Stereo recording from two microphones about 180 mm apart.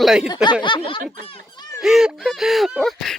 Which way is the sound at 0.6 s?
25° left (ahead or behind).